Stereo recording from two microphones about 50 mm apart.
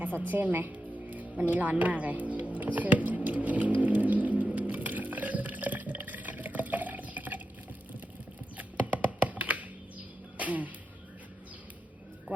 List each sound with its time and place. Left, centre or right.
0.0 s music: right
1.5 s speech: right
3.2 s vehicle: right
8.5 s computer keyboard: right
10.3 s music: right